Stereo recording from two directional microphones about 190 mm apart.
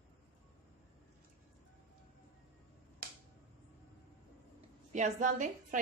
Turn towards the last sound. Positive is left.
turn(degrees=-45)  # may be behind; listen again after turning